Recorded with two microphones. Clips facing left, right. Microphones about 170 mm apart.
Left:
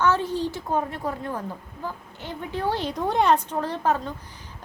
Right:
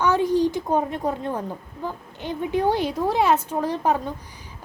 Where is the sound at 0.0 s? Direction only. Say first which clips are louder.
Right 4 dB; 15° right (ahead or behind).